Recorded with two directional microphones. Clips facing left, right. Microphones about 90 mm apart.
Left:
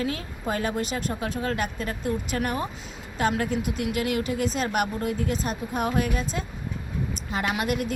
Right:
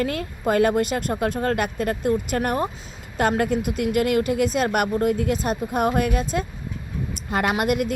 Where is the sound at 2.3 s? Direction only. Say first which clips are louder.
Right 5 dB; 45° right (ahead or behind).